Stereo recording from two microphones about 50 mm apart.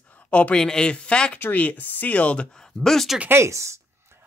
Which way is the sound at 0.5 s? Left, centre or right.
Centre.